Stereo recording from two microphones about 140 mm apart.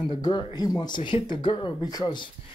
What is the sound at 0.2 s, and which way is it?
Speech, 30° left (ahead or behind).